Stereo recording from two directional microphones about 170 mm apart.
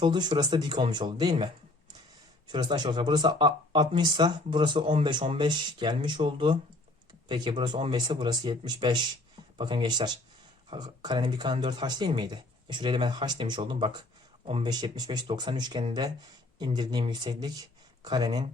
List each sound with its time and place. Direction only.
0.0 s speech: 25° right (ahead or behind)
2.5 s speech: 25° right (ahead or behind)